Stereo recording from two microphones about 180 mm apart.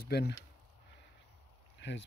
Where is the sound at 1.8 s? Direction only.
80° left.